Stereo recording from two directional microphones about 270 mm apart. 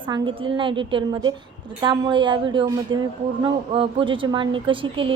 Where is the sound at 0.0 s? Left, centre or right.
Centre.